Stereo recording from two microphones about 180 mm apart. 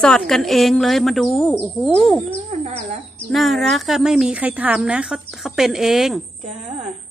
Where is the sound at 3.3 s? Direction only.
Centre (ahead or behind).